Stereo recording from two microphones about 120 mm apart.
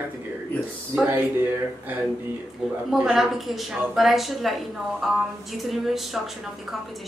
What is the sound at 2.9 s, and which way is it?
A woman's voice, 5° right (ahead or behind).